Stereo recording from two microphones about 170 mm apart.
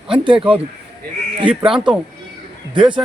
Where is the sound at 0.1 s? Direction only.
30° right (ahead or behind).